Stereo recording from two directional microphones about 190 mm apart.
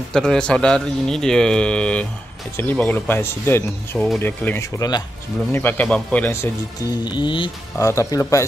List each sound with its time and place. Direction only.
0.1 s speech: 5° left (ahead or behind)
7.1 s speech: 25° left (ahead or behind)